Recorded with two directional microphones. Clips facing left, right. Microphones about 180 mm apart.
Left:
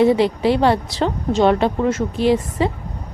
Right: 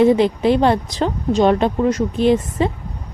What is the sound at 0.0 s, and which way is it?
Speech, 20° right (ahead or behind).